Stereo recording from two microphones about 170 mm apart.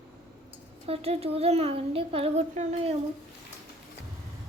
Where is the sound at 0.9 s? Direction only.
35° right (ahead or behind).